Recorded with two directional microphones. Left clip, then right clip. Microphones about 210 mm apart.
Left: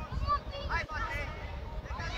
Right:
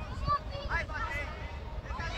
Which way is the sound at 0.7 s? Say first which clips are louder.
Even; 30° left (ahead or behind).